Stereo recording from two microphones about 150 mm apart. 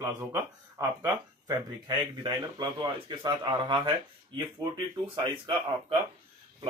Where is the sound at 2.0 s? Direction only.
25° right (ahead or behind).